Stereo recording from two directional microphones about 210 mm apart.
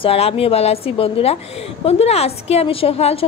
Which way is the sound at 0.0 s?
25° left (ahead or behind).